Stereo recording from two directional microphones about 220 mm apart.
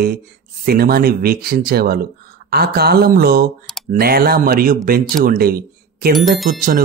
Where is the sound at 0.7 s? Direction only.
45° right (ahead or behind).